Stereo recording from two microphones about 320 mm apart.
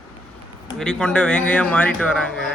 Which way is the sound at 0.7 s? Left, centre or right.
Centre.